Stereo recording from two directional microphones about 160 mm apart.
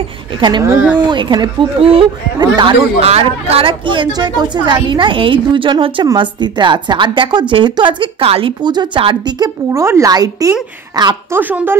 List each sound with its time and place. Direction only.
0.4 s a woman's voice: 25° right (ahead or behind)
3.0 s a woman's voice: 40° right (ahead or behind); by 10.5 s 25° right (ahead or behind)
11.3 s speech: 10° right (ahead or behind)